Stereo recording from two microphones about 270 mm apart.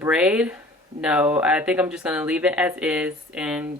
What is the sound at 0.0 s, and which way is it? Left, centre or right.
Speech, centre.